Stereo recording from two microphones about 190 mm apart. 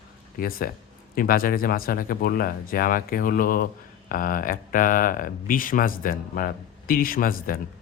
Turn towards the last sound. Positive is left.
turn(degrees=50)  # may be behind; listen again after turning